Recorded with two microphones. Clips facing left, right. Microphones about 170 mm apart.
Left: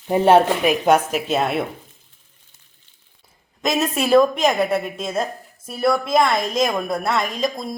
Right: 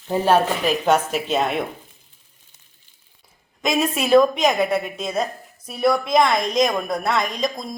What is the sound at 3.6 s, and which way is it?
A woman's voice, centre (ahead or behind).